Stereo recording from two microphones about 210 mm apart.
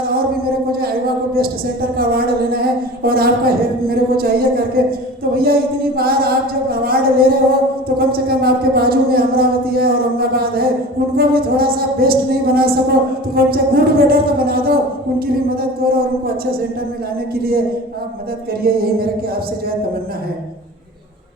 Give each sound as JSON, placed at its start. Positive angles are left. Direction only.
{"t": 2.0, "sound": "speech", "side_deg": -45}
{"t": 17.3, "sound": "speech", "side_deg": -45}
{"t": 18.6, "sound": "speech", "side_deg": -45}